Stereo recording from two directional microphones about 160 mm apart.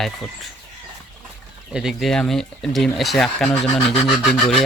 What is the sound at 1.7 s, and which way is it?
Speech, 5° right (ahead or behind).